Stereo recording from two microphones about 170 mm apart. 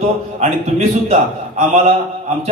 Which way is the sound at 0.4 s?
40° right (ahead or behind).